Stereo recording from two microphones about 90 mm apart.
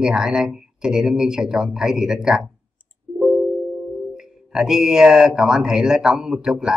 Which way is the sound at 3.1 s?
5° right (ahead or behind).